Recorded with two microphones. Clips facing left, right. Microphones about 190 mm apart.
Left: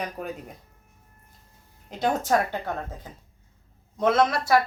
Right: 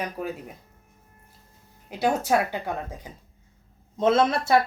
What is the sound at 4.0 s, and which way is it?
Speech, 25° right (ahead or behind).